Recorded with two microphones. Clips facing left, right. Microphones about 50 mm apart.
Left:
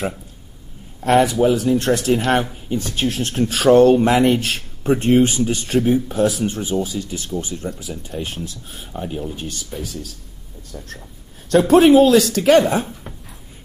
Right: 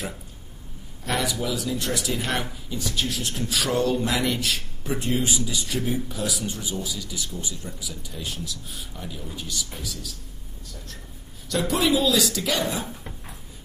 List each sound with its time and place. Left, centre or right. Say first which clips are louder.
1.0 s speech: left 12 dB; left
11.4 s speech: left 12 dB; left